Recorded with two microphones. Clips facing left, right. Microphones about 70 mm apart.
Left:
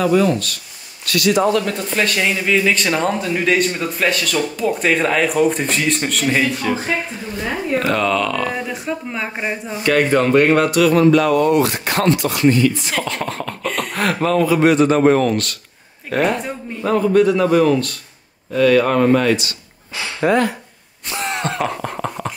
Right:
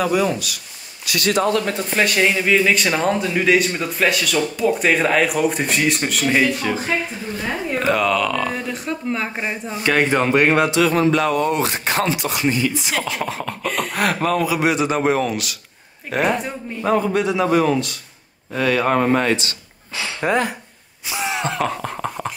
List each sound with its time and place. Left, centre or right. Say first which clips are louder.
0.0 s speech: left 3 dB; centre
7.8 s speech: right 2 dB; centre
9.8 s speech: left 3 dB; centre
18.5 s speech: left 4 dB; right
20.2 s speech: left 4 dB; centre
21.1 s a sound: left 1 dB; centre